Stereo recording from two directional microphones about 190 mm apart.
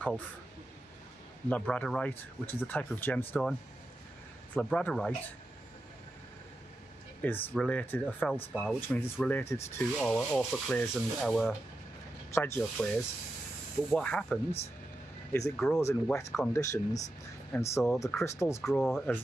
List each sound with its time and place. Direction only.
1.5 s speech: 5° left (ahead or behind)
4.6 s rub: 5° left (ahead or behind)
7.2 s speech: 10° left (ahead or behind)
9.9 s rub: 5° left (ahead or behind)
12.4 s speech: 10° left (ahead or behind)
13.8 s rub: 5° left (ahead or behind)
15.8 s speech: 15° left (ahead or behind)
18.7 s rub: centre (ahead or behind)